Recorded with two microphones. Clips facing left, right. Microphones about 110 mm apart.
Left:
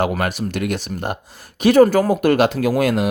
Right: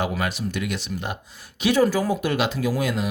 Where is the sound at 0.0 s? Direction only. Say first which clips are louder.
Left 5 dB; 55° left (ahead or behind).